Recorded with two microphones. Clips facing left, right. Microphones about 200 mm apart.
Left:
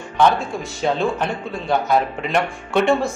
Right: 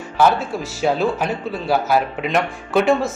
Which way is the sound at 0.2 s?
5° right (ahead or behind).